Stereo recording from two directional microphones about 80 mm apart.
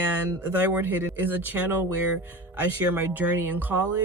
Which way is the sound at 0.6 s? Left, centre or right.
Right.